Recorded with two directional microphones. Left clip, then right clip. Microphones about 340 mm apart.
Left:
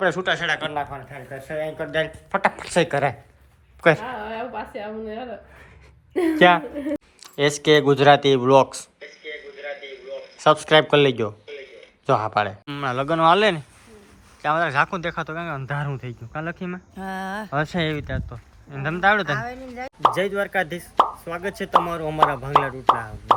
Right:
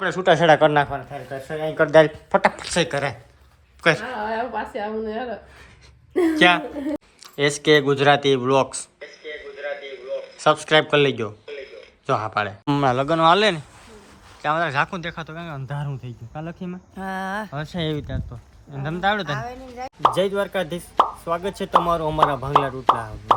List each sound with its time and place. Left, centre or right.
0.0 s speech: centre
0.3 s speech: centre
2.6 s a woman's voice: centre
6.1 s speech: centre
9.6 s a sound: centre
12.0 s speech: centre
12.6 s speech: centre
19.3 s speech: right
19.6 s speech: centre
20.9 s speech: centre